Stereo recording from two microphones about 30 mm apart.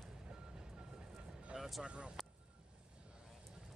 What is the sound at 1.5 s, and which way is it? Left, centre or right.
Music, right.